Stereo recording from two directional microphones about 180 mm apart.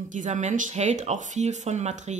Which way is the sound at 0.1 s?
45° right (ahead or behind).